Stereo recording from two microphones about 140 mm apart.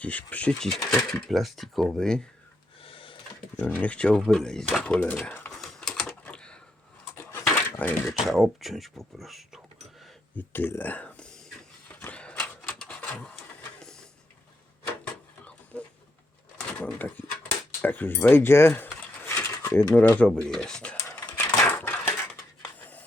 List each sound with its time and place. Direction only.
0.0 s speech: 10° left (ahead or behind)
2.8 s a sound: 40° left (ahead or behind)
3.6 s speech: 10° left (ahead or behind)
5.6 s typing: 5° left (ahead or behind)
7.3 s dishes: 20° left (ahead or behind)
8.0 s speech: centre (ahead or behind)
10.3 s a sound: 15° left (ahead or behind)
15.7 s a sound: 5° left (ahead or behind)
16.6 s speech: 10° left (ahead or behind)
18.9 s mechanisms: 15° left (ahead or behind)
19.9 s speech: 10° left (ahead or behind)
21.8 s a sound: 15° left (ahead or behind)